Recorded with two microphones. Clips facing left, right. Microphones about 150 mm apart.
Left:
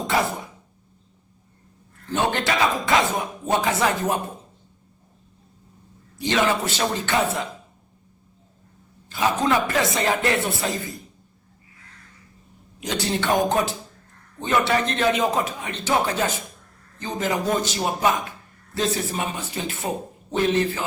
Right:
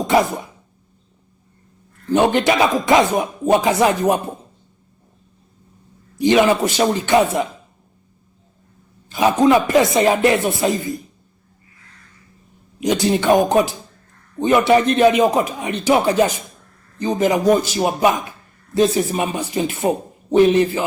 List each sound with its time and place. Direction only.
2.1 s a man's voice: 15° right (ahead or behind)
6.1 s a man's voice: 15° right (ahead or behind)
9.0 s a man's voice: 15° right (ahead or behind)
12.8 s a man's voice: 15° right (ahead or behind)